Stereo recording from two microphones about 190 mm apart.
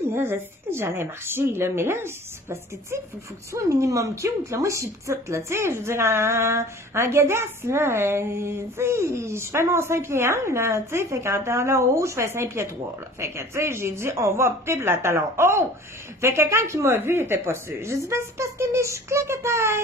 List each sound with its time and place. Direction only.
0.1 s a woman's voice: 10° right (ahead or behind)